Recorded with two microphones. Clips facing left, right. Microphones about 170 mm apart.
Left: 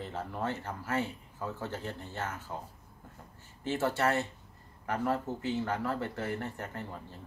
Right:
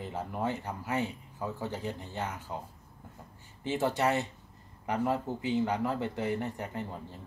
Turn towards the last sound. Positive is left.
turn(degrees=-15)  # may be behind; listen again after turning